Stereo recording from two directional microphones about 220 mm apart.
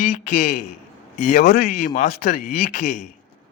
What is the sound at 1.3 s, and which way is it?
A man's voice, 45° left (ahead or behind).